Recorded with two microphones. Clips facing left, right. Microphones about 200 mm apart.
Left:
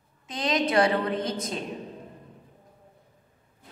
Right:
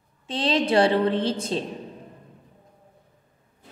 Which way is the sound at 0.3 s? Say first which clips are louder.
Right 4 dB; 30° right (ahead or behind).